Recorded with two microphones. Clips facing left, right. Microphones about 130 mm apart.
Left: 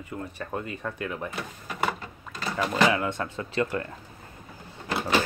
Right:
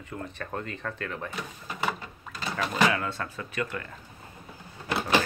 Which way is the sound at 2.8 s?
20° left (ahead or behind).